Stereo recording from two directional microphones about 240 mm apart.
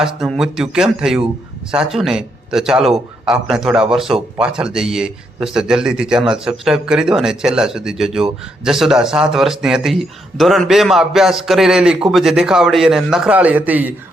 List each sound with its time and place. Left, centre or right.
0.0 s a man's voice: centre